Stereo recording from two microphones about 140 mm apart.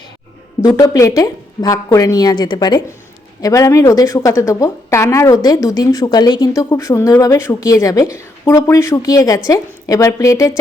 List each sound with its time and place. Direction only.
0.6 s a woman's voice: 25° left (ahead or behind)